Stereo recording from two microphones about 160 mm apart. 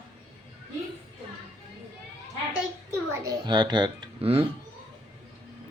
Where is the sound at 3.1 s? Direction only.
20° right (ahead or behind); by 4.5 s 35° right (ahead or behind).